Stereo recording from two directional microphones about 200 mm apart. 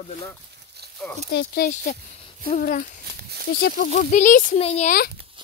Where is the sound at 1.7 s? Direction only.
35° left (ahead or behind).